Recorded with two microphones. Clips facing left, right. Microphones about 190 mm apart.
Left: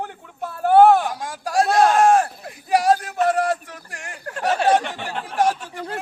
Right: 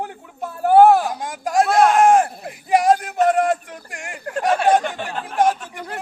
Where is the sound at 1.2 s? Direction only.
20° right (ahead or behind).